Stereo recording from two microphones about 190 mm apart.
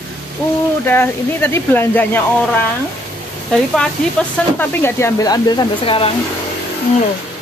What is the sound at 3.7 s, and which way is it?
Speech, 5° left (ahead or behind).